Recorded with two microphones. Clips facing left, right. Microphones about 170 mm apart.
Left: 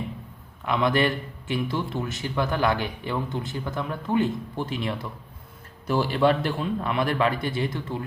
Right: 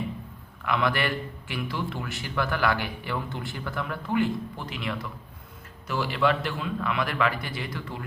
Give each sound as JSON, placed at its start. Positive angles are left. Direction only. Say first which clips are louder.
{"t": 0.6, "sound": "a man's voice", "louder": "left 4 dB", "side_deg": 25}